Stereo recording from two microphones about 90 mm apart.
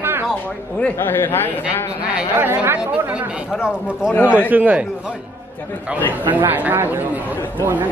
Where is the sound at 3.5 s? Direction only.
10° right (ahead or behind).